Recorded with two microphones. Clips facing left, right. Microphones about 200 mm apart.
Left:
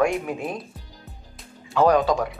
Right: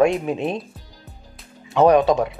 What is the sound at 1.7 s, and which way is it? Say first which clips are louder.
Speech: right 4 dB; 20° right (ahead or behind).